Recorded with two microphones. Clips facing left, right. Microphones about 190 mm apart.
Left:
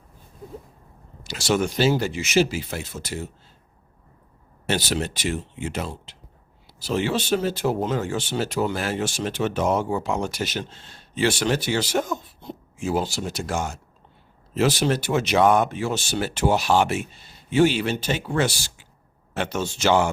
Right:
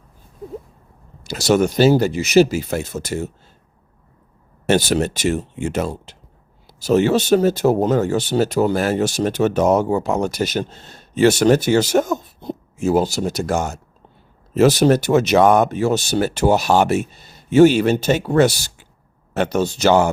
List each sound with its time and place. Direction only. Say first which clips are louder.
1.2 s speech: right 7 dB; 40° right (ahead or behind)
4.6 s speech: right 8 dB; 50° right (ahead or behind)
19.3 s speech: right 8 dB; 40° right (ahead or behind)